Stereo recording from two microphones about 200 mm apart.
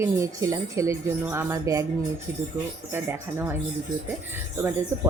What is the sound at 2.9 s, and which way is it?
A woman's voice, 10° right (ahead or behind).